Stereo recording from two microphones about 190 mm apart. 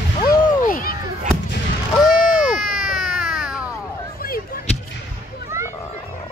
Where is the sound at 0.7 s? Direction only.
50° left (ahead or behind).